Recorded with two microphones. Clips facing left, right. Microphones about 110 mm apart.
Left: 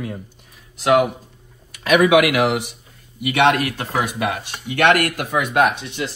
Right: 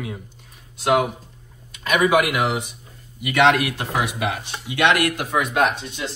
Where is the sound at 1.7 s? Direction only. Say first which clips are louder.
Left 4 dB; 70° left (ahead or behind).